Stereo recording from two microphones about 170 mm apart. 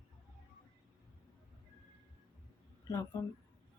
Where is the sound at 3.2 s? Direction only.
15° left (ahead or behind).